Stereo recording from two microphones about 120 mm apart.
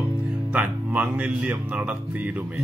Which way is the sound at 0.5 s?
15° right (ahead or behind).